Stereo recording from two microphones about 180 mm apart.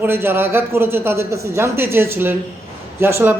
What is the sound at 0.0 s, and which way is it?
A man's voice, 10° right (ahead or behind).